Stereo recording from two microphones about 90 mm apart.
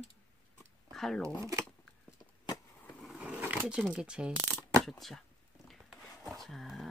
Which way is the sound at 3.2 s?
15° right (ahead or behind).